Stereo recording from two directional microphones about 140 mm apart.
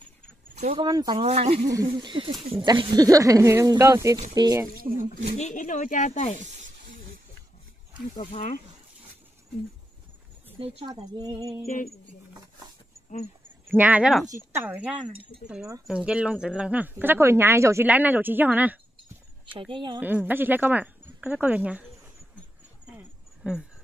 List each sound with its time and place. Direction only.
0.7 s speech: 30° right (ahead or behind)
1.1 s speech: 50° right (ahead or behind)
1.7 s speech: 30° right (ahead or behind)
4.9 s speech: 65° left (ahead or behind)
8.3 s speech: 55° left (ahead or behind)
13.7 s speech: 10° right (ahead or behind)
19.7 s speech: 35° right (ahead or behind)
20.0 s speech: 15° right (ahead or behind)
22.8 s a sound: 5° right (ahead or behind)